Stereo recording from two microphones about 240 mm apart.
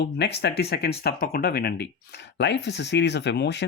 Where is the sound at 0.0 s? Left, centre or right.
Left.